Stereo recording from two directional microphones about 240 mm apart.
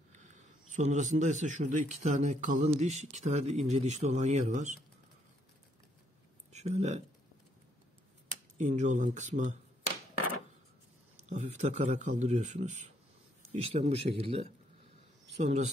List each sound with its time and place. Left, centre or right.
0.1 s speech: right
6.5 s speech: right
8.5 s speech: right
11.2 s speech: right